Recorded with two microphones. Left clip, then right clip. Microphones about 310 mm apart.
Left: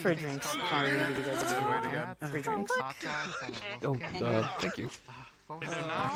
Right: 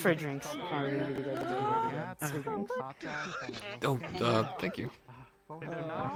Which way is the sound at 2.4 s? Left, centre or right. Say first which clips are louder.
Left 7 dB; left.